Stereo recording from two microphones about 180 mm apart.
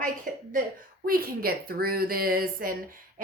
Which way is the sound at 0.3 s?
45° right (ahead or behind).